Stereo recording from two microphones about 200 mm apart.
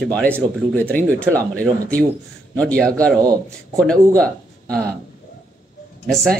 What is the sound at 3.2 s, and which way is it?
Speech, 20° right (ahead or behind).